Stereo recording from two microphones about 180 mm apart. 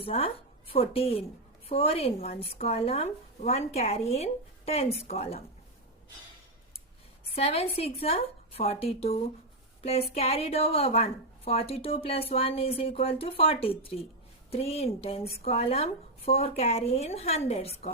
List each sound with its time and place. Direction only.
0.0 s a woman's voice: 30° left (ahead or behind)
7.3 s a woman's voice: 35° left (ahead or behind)